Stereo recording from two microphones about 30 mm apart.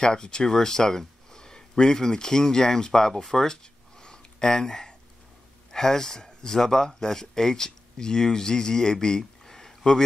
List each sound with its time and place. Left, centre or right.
0.0 s speech: left
4.0 s a sound: left
5.7 s speech: centre